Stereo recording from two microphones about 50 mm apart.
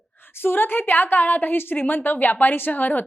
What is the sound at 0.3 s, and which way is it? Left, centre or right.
A woman's voice, left.